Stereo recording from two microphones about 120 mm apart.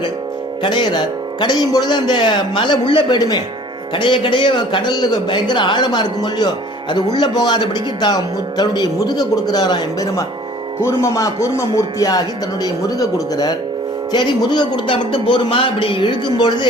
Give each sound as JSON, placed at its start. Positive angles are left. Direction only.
{"t": 0.6, "sound": "speech", "side_deg": 40}
{"t": 10.8, "sound": "music", "side_deg": 25}
{"t": 12.6, "sound": "speech", "side_deg": 30}